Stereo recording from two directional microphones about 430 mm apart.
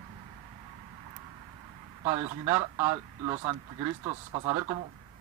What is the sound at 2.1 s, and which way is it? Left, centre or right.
Speech, centre.